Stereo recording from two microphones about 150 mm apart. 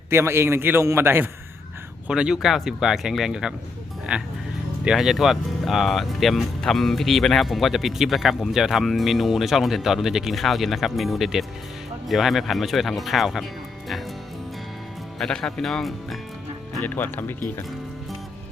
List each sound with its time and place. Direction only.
0.1 s a man's voice: 15° right (ahead or behind); by 13.4 s centre (ahead or behind)
15.2 s speech: 5° left (ahead or behind)
16.8 s speech: 10° left (ahead or behind)